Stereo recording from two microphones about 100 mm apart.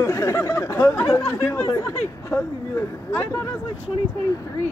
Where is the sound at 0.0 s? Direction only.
30° left (ahead or behind).